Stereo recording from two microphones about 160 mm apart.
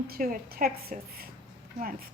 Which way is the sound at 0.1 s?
65° right (ahead or behind).